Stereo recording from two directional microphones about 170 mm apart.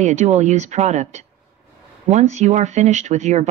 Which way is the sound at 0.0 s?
45° right (ahead or behind).